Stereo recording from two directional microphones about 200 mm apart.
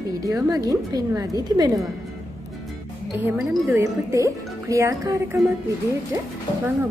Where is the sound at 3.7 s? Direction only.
15° right (ahead or behind).